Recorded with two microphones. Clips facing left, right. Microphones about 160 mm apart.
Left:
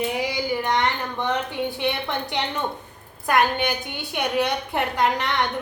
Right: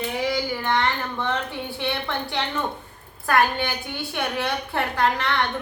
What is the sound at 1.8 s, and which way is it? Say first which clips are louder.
A woman's voice: left 2 dB; 20° left (ahead or behind).